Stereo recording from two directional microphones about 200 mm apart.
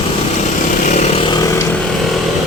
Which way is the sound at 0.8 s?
35° left (ahead or behind).